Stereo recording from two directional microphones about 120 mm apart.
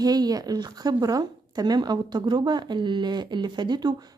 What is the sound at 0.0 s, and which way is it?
A woman's voice, 35° right (ahead or behind).